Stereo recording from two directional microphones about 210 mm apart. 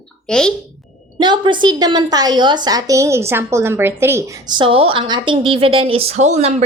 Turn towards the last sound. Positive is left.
turn(degrees=-35)  # may be behind; listen again after turning